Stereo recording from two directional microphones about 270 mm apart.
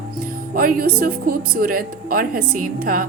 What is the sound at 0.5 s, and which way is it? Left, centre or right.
Speech, right.